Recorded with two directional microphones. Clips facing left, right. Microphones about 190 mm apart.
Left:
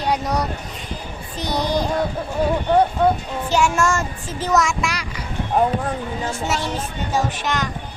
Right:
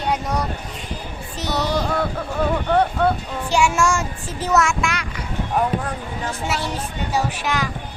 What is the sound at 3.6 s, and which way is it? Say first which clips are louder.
Speech: even; 10° right (ahead or behind).